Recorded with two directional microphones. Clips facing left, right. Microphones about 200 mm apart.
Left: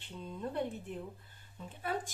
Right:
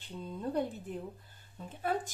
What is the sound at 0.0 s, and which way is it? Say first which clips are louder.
A woman's voice: right 3 dB; 40° right (ahead or behind).